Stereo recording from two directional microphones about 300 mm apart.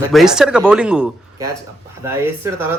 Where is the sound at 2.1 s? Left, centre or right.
Centre.